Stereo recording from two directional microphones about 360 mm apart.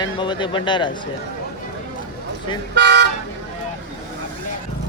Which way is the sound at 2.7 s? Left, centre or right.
Right.